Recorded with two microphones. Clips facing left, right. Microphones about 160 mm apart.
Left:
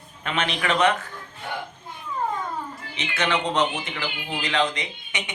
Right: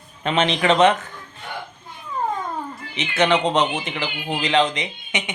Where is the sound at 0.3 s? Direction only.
25° right (ahead or behind).